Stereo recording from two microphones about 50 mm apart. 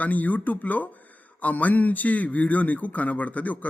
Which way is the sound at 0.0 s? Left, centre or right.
Left.